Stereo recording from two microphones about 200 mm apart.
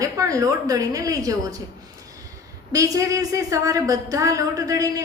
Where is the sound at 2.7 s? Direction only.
15° right (ahead or behind).